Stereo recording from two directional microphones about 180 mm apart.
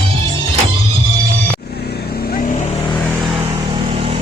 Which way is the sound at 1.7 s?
65° left (ahead or behind).